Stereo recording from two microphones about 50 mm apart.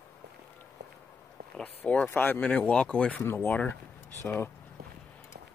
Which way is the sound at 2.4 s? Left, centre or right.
Left.